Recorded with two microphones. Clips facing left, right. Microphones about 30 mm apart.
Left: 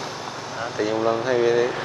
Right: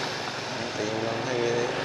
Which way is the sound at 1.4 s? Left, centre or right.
Centre.